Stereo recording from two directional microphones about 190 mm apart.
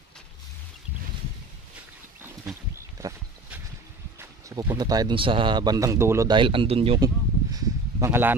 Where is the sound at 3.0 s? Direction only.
15° right (ahead or behind).